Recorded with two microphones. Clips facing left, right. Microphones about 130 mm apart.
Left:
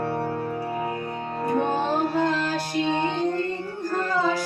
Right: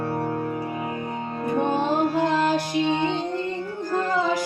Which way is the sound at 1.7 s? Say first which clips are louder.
Right 2 dB; 15° right (ahead or behind).